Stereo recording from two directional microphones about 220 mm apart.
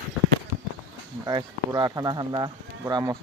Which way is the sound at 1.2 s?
20° right (ahead or behind).